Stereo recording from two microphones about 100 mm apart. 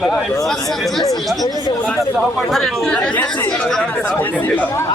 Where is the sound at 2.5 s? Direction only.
5° left (ahead or behind).